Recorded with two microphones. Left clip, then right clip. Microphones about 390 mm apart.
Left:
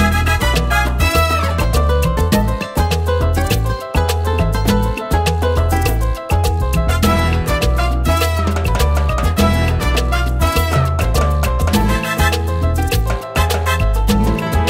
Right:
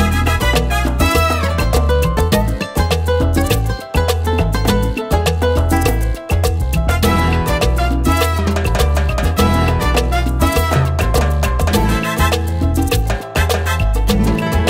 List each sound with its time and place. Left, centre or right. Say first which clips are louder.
2.1 s music: right 1 dB; right
7.0 s music: right 2 dB; right
9.4 s music: right 3 dB; right
11.7 s music: even; right
13.5 s music: even; right